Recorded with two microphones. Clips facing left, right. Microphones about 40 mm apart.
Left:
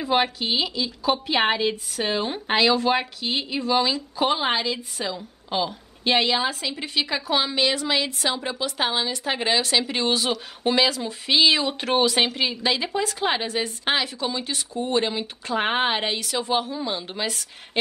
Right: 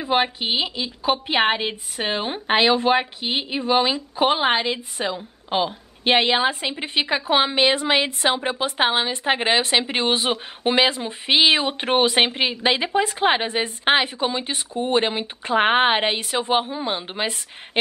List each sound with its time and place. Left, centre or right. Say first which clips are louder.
0.0 s a woman's voice: right 1 dB; centre